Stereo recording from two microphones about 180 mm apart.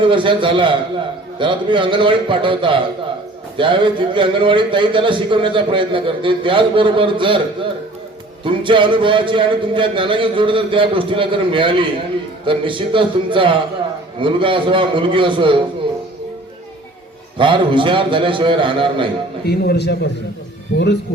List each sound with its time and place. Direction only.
0.0 s a man's voice: 30° right (ahead or behind)
17.3 s a man's voice: 30° right (ahead or behind)
19.5 s a man's voice: 65° left (ahead or behind)